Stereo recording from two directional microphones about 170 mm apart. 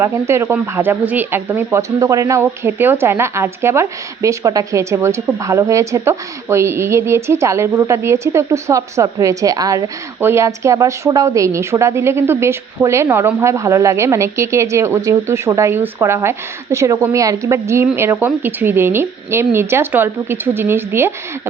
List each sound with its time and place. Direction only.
0.0 s speech: 15° right (ahead or behind)